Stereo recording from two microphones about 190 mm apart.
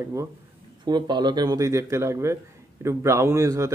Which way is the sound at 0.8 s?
20° right (ahead or behind).